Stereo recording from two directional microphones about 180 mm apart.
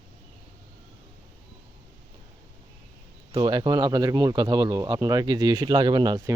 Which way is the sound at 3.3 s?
25° right (ahead or behind).